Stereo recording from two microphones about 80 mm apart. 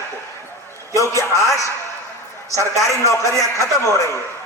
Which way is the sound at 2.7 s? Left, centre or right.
Left.